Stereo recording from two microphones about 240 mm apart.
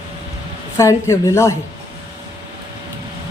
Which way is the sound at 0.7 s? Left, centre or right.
Centre.